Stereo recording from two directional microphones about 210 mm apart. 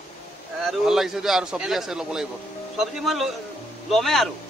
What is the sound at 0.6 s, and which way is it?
A man's voice, centre (ahead or behind).